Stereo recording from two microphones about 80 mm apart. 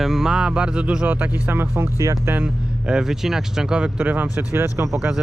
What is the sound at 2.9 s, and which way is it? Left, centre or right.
Speech, centre.